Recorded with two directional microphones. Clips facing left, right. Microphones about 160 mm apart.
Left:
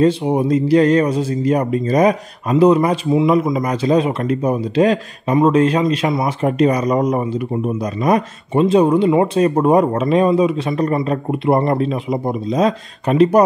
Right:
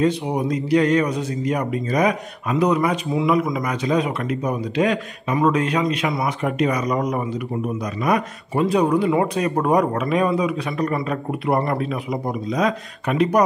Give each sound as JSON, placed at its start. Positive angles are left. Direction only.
{"t": 0.0, "sound": "speech", "side_deg": 30}